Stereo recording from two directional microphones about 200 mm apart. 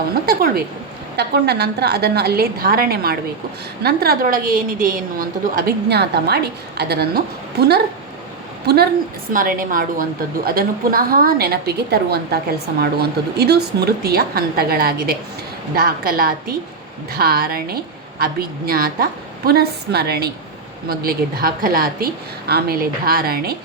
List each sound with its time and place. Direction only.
0.1 s a woman's voice: 50° right (ahead or behind)
8.6 s a woman's voice: 55° right (ahead or behind)